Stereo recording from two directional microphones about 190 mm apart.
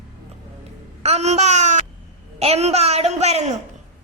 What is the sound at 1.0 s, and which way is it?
Speech, 35° right (ahead or behind).